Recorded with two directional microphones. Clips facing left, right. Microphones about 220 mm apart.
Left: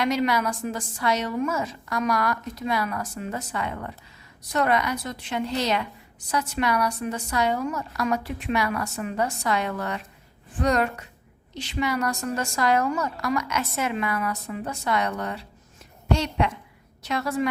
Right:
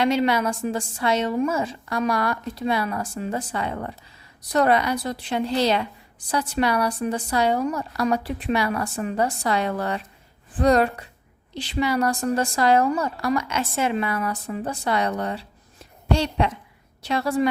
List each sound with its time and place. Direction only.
0.0 s a woman's voice: 30° right (ahead or behind)